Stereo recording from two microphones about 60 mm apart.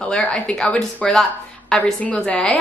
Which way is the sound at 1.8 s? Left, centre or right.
Left.